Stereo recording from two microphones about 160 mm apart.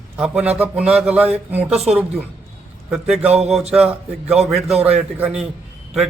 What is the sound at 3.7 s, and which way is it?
A man's voice, 5° right (ahead or behind).